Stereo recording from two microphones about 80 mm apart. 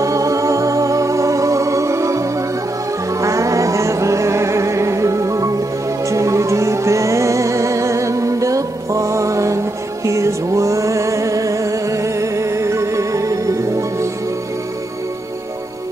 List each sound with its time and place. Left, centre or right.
0.0 s music: right